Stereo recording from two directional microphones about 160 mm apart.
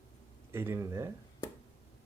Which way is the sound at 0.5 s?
15° right (ahead or behind).